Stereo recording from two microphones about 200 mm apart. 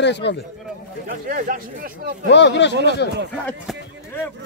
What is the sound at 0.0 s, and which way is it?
Speech, 60° left (ahead or behind).